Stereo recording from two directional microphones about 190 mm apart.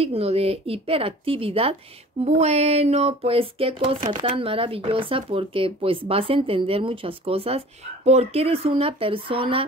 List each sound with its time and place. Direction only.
0.0 s speech: 30° right (ahead or behind)